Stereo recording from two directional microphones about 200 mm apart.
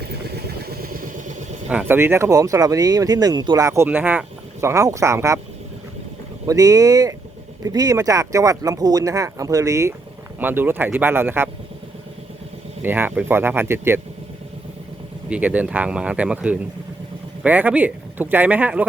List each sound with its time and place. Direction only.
0.0 s vehicle: 50° right (ahead or behind)
1.7 s speech: 10° right (ahead or behind)
6.4 s speech: 15° right (ahead or behind)
12.8 s speech: 10° right (ahead or behind)
15.3 s speech: 5° right (ahead or behind)